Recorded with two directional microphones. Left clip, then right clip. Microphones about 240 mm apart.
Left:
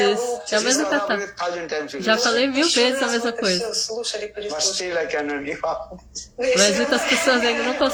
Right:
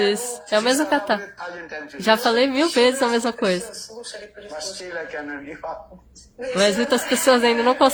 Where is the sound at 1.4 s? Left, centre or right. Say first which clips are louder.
Left 7 dB; left.